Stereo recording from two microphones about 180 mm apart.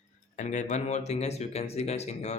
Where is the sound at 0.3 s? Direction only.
40° left (ahead or behind).